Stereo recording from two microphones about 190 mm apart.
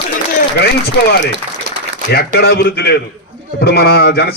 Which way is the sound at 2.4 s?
55° left (ahead or behind).